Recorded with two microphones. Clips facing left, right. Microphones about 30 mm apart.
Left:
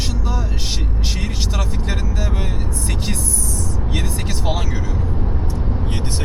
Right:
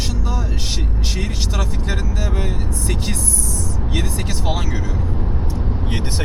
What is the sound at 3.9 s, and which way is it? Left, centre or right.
Speech, centre.